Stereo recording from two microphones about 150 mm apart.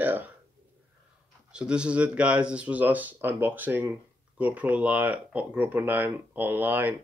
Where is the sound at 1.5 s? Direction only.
5° right (ahead or behind).